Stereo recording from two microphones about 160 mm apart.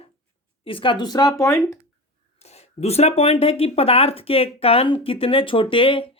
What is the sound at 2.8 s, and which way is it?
Speech, 40° left (ahead or behind).